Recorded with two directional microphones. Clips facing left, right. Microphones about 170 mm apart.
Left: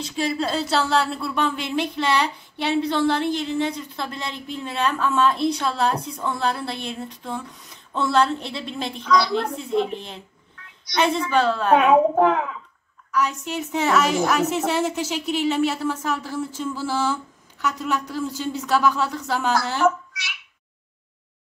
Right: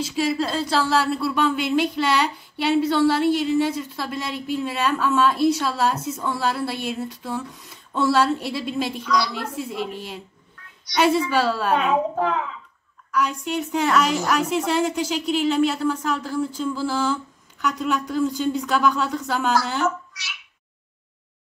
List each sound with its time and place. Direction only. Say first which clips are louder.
0.0 s speech: right 2 dB; centre (ahead or behind)
9.0 s a woman's voice: left 7 dB; 50° left (ahead or behind)
9.6 s a woman's voice: left 5 dB; 5° right (ahead or behind)
11.7 s a child's voice: left 8 dB; 55° left (ahead or behind)
13.1 s speech: right 1 dB; centre (ahead or behind)